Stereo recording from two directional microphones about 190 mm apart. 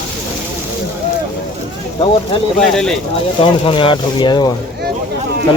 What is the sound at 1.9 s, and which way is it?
Speech, 30° left (ahead or behind).